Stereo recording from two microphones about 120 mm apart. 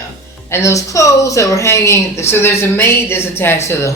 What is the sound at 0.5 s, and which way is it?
A woman's voice, 25° left (ahead or behind).